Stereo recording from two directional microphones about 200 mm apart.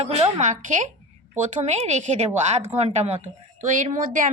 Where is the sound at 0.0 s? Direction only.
35° right (ahead or behind).